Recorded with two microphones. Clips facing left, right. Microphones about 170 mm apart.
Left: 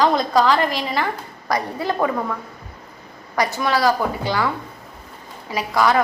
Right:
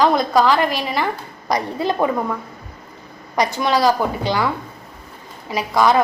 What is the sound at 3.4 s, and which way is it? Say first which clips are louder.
A woman's voice: right 2 dB; 20° right (ahead or behind).